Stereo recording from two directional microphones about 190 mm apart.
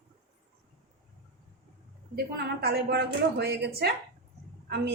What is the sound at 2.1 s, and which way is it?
A woman's voice, 60° right (ahead or behind).